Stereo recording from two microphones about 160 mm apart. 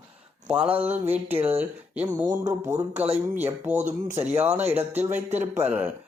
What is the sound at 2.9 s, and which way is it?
Speech, 40° right (ahead or behind).